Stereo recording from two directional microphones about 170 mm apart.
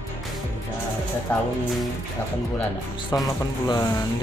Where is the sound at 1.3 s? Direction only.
10° left (ahead or behind).